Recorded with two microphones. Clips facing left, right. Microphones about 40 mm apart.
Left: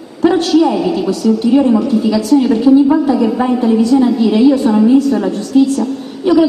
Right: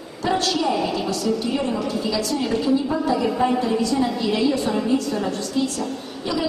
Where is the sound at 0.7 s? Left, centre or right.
Centre.